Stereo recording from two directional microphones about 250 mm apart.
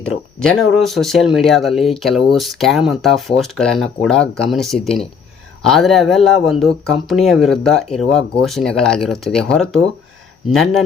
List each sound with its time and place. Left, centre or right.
0.3 s speech: centre